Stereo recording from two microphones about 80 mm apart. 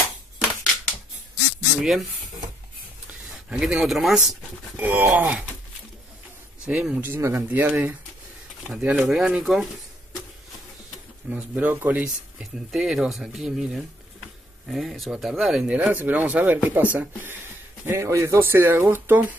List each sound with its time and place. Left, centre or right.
1.8 s speech: centre
3.1 s speech: centre
4.7 s speech: right
6.6 s speech: centre
7.0 s speech: right
7.4 s speech: centre
11.2 s speech: centre
12.7 s speech: centre
15.7 s speech: centre
17.8 s speech: right